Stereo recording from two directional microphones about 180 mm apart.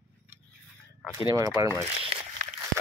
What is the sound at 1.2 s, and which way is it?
Speech, 20° right (ahead or behind).